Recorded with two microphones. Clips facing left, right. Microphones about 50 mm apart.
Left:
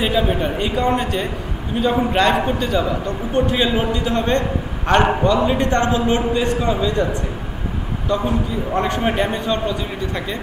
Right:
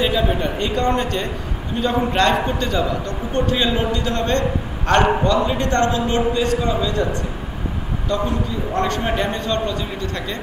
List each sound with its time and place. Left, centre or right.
0.0 s a man's voice: centre
8.1 s a man's voice: centre